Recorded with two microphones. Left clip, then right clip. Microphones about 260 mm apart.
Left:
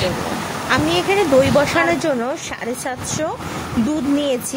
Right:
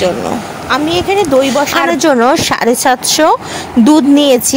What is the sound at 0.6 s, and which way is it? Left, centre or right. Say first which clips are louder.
A woman's voice: right 5 dB; centre.